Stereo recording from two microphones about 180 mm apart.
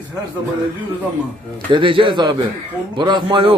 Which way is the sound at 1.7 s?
30° right (ahead or behind).